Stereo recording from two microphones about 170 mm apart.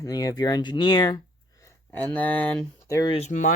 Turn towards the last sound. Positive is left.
turn(degrees=45)  # may be behind; listen again after turning